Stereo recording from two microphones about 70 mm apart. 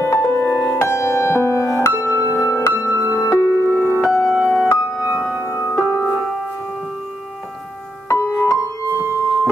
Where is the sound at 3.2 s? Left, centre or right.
Left.